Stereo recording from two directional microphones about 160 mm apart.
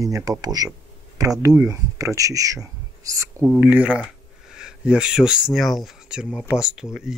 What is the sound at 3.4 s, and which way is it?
Speech, 10° right (ahead or behind).